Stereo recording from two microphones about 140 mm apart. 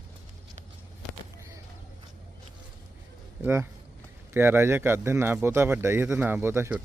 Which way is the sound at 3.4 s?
15° right (ahead or behind).